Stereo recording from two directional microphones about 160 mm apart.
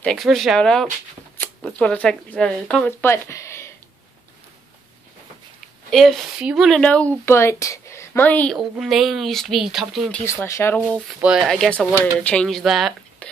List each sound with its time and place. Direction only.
0.0 s speech: centre (ahead or behind)
5.9 s a woman's voice: centre (ahead or behind)
8.5 s speech: centre (ahead or behind)
10.4 s speech: 15° left (ahead or behind)
11.1 s speech: 5° right (ahead or behind)